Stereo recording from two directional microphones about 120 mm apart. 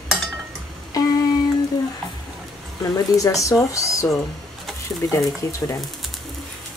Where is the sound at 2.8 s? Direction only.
30° left (ahead or behind).